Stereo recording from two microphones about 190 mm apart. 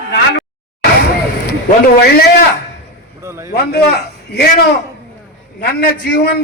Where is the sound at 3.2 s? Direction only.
15° right (ahead or behind).